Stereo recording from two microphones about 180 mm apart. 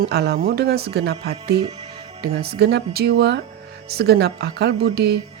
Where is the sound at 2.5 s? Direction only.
65° right (ahead or behind).